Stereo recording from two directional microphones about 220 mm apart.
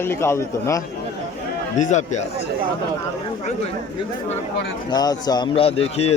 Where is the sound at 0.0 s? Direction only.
10° left (ahead or behind).